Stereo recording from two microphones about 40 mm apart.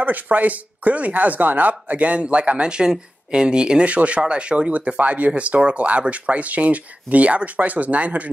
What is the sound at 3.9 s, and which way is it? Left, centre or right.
Speech, right.